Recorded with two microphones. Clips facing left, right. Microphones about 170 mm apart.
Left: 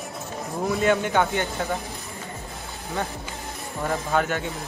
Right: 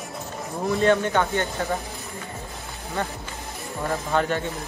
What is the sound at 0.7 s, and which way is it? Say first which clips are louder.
Speech: right 1 dB; 5° left (ahead or behind).